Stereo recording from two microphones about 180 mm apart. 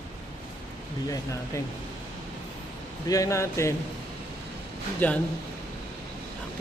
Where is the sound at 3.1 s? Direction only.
20° left (ahead or behind).